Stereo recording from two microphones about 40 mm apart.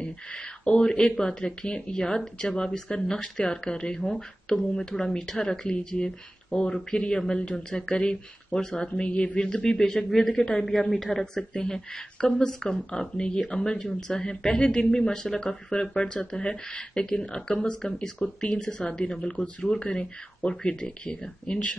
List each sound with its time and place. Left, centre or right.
0.0 s speech: left; by 5.7 s centre
5.7 s speech: left
7.9 s speech: left
8.5 s speech: centre
10.0 s speech: centre; by 21.7 s left